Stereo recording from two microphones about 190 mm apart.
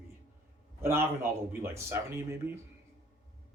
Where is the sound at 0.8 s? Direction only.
10° right (ahead or behind).